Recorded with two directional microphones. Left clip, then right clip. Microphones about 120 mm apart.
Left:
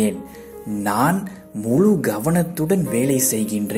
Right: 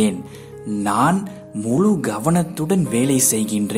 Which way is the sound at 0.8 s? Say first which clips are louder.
Right 2 dB; 5° right (ahead or behind).